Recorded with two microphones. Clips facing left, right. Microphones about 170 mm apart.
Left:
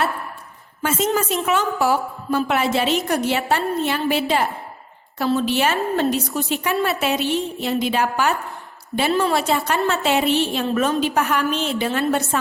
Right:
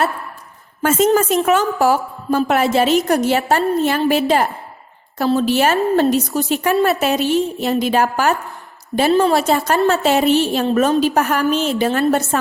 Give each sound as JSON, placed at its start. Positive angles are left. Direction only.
{"t": 0.8, "sound": "a woman's voice", "side_deg": -50}